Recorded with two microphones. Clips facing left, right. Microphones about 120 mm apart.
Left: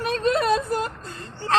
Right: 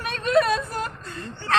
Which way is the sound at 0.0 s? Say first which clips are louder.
Right 1 dB; 25° left (ahead or behind).